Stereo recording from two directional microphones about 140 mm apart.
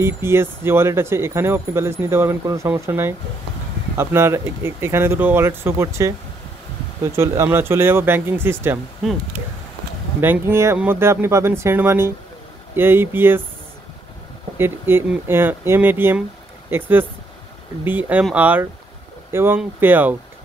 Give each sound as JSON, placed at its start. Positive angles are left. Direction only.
{"t": 0.0, "sound": "speech", "side_deg": -15}
{"t": 10.2, "sound": "speech", "side_deg": -15}
{"t": 14.6, "sound": "speech", "side_deg": -15}